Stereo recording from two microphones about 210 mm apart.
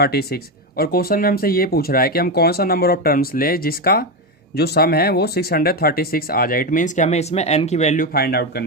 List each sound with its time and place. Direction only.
0.0 s speech: 50° left (ahead or behind)